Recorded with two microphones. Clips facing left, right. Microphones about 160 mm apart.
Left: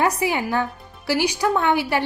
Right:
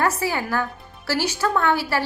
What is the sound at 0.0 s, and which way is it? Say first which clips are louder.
A woman's voice: left 2 dB; 15° left (ahead or behind).